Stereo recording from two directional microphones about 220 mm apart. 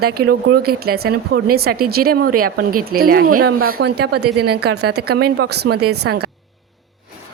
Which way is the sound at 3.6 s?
75° right (ahead or behind).